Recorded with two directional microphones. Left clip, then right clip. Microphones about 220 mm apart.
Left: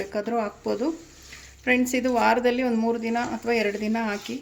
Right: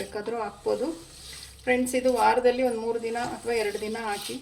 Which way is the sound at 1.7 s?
45° left (ahead or behind).